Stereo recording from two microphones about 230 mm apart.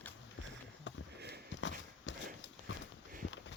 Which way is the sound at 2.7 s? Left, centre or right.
Left.